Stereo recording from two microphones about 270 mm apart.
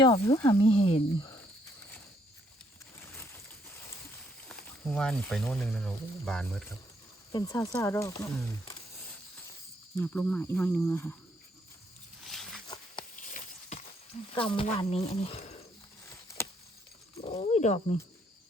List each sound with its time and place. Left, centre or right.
0.0 s speech: centre
4.4 s speech: centre
10.0 s speech: centre
12.3 s wild animals: centre
12.6 s a sound: centre
13.1 s a sound: left
14.3 s speech: centre
17.2 s speech: left